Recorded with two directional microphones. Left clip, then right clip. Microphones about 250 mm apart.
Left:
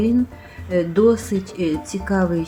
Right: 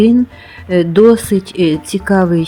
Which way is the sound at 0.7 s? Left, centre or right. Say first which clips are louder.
Right 8 dB; right.